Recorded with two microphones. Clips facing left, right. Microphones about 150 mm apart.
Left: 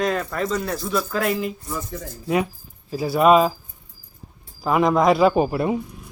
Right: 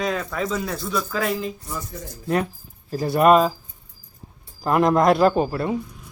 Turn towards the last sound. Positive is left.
turn(degrees=15)  # may be behind; listen again after turning